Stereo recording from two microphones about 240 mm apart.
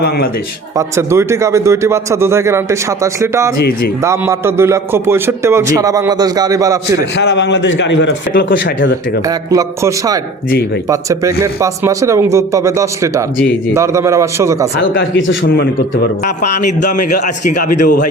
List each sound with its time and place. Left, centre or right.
0.8 s a man's voice: centre
7.2 s a man's voice: left
9.5 s a man's voice: centre
14.9 s a man's voice: left
16.8 s a man's voice: left